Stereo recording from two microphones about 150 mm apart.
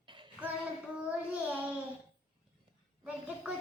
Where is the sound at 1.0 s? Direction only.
10° right (ahead or behind).